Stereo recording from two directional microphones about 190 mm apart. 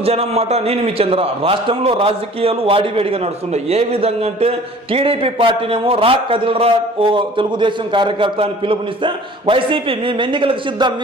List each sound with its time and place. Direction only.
0.0 s a man's voice: 35° right (ahead or behind)